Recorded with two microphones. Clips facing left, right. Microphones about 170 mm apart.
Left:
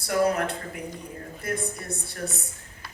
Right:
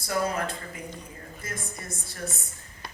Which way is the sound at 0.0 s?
65° left (ahead or behind).